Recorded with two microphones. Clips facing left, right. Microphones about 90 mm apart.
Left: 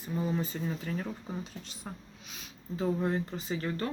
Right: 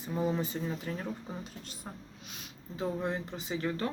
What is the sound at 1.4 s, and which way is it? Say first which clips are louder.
Speech: left 1 dB; 50° right (ahead or behind).